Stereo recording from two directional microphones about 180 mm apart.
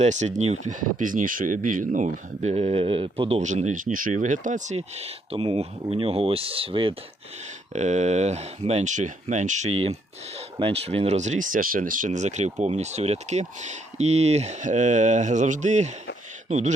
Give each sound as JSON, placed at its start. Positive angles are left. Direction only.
{"t": 0.0, "sound": "speech", "side_deg": -40}